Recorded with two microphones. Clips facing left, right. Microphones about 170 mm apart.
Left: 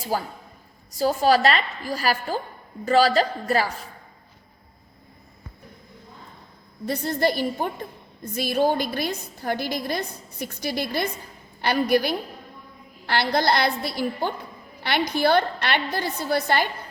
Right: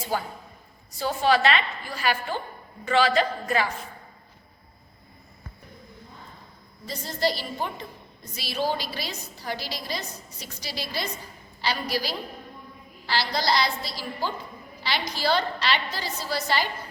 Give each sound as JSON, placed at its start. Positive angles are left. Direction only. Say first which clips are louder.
{"t": 0.1, "sound": "a woman's voice", "louder": "left 2 dB", "side_deg": 40}
{"t": 6.8, "sound": "a woman's voice", "louder": "left 4 dB", "side_deg": 60}